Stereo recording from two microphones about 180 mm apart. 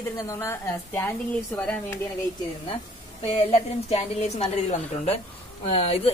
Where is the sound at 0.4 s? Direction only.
15° left (ahead or behind).